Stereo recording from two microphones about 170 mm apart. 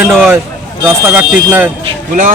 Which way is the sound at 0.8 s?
10° right (ahead or behind).